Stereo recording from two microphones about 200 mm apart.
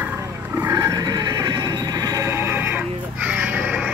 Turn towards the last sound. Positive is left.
turn(degrees=-5)  # may be behind; listen again after turning